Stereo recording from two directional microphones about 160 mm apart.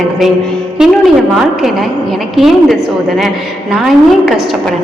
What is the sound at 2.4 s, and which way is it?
A woman's voice, centre (ahead or behind).